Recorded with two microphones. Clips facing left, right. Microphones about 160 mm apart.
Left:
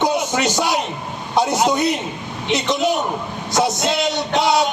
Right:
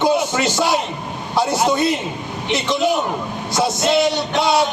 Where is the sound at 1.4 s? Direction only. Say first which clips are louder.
Even; 20° left (ahead or behind).